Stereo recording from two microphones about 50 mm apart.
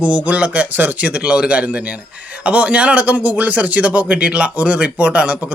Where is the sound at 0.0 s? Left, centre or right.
Right.